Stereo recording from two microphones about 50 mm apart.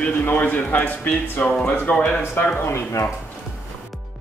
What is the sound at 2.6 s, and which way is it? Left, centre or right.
Speech, left.